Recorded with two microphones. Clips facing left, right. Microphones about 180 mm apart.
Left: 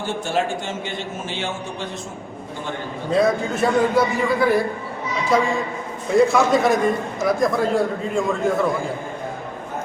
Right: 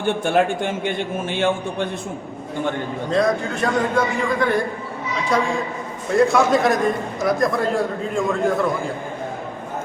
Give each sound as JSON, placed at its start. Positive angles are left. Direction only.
{"t": 0.0, "sound": "a man's voice", "side_deg": -55}
{"t": 3.1, "sound": "a man's voice", "side_deg": 5}